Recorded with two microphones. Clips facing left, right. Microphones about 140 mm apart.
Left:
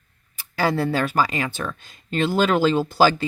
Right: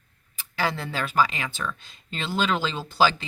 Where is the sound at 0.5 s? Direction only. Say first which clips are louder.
Left 7 dB; 45° left (ahead or behind).